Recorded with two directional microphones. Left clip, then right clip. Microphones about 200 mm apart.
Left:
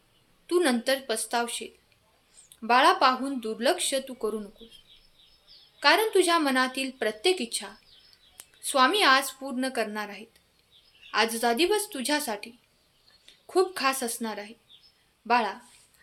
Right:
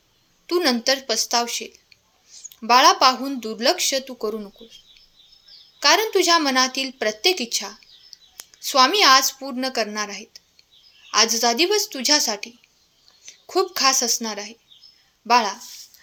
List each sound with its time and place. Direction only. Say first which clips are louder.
0.4 s a woman's voice: right 5 dB; 25° right (ahead or behind)
5.8 s a woman's voice: right 4 dB; 25° right (ahead or behind)
8.1 s a sound: right 13 dB; 5° right (ahead or behind)
8.6 s a woman's voice: right 6 dB; 25° right (ahead or behind)